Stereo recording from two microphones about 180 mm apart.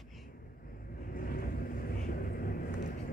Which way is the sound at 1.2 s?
55° left (ahead or behind).